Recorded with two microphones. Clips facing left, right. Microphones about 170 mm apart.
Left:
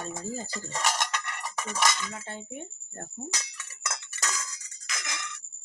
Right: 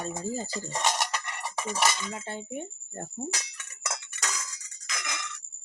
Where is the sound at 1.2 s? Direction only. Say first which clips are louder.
Right 2 dB; 15° right (ahead or behind).